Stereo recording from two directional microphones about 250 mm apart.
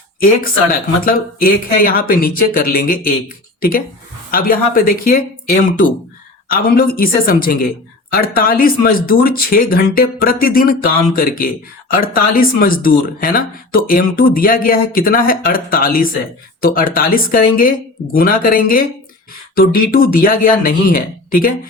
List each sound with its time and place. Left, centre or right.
0.2 s speech: left